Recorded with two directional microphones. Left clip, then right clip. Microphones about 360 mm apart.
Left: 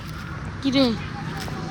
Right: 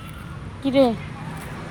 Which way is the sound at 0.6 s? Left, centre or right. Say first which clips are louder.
Right 3 dB; centre.